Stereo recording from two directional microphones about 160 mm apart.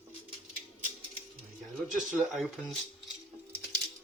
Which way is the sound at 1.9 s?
Centre (ahead or behind).